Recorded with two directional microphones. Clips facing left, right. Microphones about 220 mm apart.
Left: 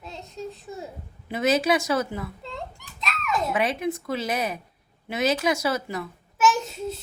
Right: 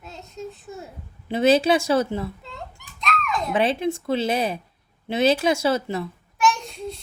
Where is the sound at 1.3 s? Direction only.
30° right (ahead or behind).